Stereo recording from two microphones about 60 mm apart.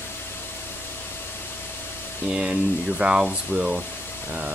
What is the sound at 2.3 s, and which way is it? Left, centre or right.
Speech, centre.